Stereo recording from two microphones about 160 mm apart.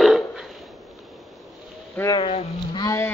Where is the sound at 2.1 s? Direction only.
30° left (ahead or behind).